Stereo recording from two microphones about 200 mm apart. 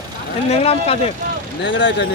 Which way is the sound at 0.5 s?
30° left (ahead or behind).